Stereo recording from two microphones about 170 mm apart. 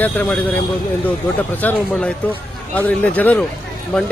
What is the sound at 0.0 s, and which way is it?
Speech, 10° left (ahead or behind).